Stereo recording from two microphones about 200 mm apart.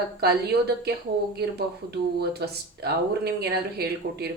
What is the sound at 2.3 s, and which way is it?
Speech, 55° right (ahead or behind).